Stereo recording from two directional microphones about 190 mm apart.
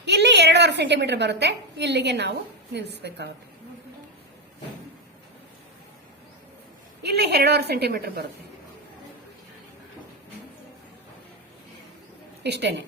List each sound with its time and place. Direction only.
0.0 s a woman's voice: 65° right (ahead or behind)
7.0 s a woman's voice: 60° right (ahead or behind)
12.4 s a woman's voice: 65° right (ahead or behind)